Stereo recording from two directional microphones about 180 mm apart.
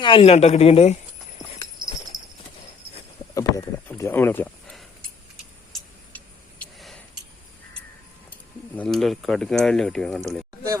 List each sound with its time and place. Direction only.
0.0 s a woman's voice: 30° left (ahead or behind)
2.1 s clip-clop: 20° right (ahead or behind)
3.3 s speech: 15° left (ahead or behind)
6.1 s vehicle: 5° left (ahead or behind)
8.7 s speech: 5° left (ahead or behind)